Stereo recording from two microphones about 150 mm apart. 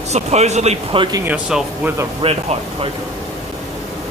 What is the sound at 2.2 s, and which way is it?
Speech, 40° right (ahead or behind).